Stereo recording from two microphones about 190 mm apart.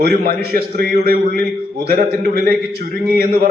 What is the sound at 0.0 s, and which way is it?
A man's voice, 50° right (ahead or behind).